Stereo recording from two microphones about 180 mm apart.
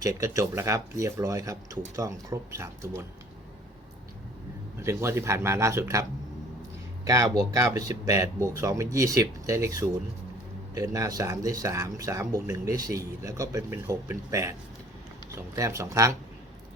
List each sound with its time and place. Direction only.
0.0 s speech: 15° right (ahead or behind)
4.8 s speech: 15° right (ahead or behind)
15.5 s speech: 15° right (ahead or behind)